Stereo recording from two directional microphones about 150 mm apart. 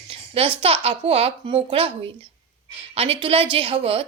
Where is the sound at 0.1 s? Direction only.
35° right (ahead or behind).